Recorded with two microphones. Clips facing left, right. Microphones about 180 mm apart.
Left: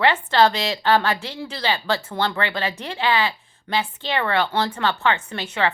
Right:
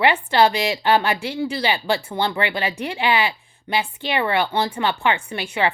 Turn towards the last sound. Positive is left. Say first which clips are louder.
# right 1 dB
turn(degrees=-10)  # may be behind; listen again after turning